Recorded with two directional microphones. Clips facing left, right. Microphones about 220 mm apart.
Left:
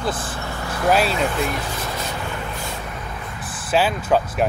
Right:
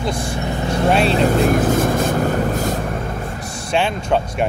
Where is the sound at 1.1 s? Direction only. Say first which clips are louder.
Right 7 dB; 40° right (ahead or behind).